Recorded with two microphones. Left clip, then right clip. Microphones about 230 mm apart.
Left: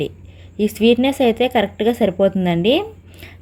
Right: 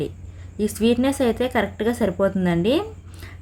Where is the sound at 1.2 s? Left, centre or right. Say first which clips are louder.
Left 5 dB; right.